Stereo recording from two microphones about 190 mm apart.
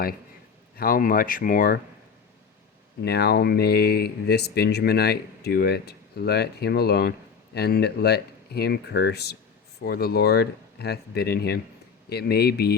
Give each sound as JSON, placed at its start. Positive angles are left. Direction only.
{"t": 0.8, "sound": "speech", "side_deg": 50}
{"t": 3.0, "sound": "speech", "side_deg": 60}